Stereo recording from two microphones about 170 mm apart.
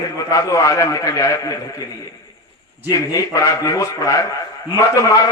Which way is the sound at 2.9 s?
20° left (ahead or behind).